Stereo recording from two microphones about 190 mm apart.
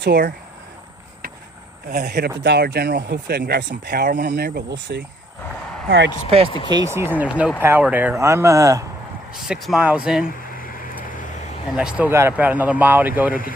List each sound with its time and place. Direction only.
0.0 s speech: 55° right (ahead or behind)
1.9 s speech: 60° right (ahead or behind)
6.7 s speech: 15° right (ahead or behind)
9.3 s speech: centre (ahead or behind)
10.2 s a sound: 45° left (ahead or behind)
11.0 s vehicle: 45° left (ahead or behind)
11.8 s speech: 5° right (ahead or behind)